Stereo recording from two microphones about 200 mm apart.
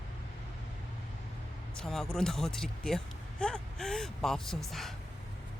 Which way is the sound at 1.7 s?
Centre (ahead or behind).